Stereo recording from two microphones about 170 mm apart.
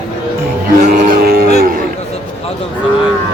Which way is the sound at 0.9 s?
55° right (ahead or behind).